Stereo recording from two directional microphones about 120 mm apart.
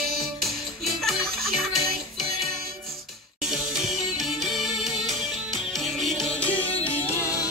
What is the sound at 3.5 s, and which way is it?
Music, 5° right (ahead or behind).